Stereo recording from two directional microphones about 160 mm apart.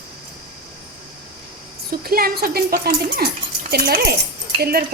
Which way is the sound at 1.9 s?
70° right (ahead or behind).